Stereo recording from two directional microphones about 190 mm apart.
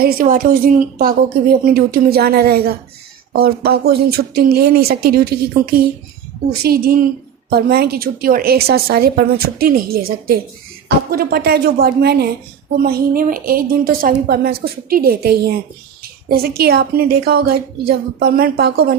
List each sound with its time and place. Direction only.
0.0 s a woman's voice: 50° right (ahead or behind)